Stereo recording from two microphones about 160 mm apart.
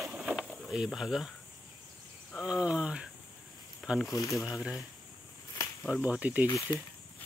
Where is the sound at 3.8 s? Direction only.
Centre (ahead or behind).